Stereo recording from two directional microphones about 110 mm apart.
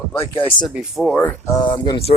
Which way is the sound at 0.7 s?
Centre (ahead or behind).